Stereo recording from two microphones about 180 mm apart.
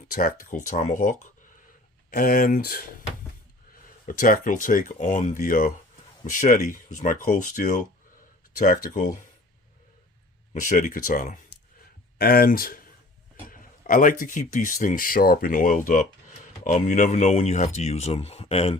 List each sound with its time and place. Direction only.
0.1 s speech: 50° left (ahead or behind)
4.0 s speech: 50° left (ahead or behind)
10.5 s speech: 45° left (ahead or behind)